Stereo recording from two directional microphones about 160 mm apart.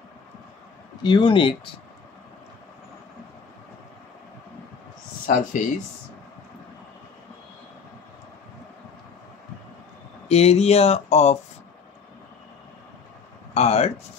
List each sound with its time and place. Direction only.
1.0 s speech: 30° left (ahead or behind)
5.2 s speech: 60° left (ahead or behind)
10.2 s speech: 40° left (ahead or behind)
13.5 s speech: 40° left (ahead or behind)